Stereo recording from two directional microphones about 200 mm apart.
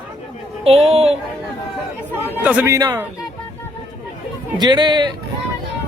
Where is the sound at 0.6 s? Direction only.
30° right (ahead or behind).